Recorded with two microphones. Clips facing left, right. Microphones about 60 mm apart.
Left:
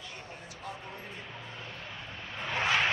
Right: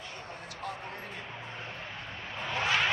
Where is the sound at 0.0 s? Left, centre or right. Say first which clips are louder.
Right 2 dB; right.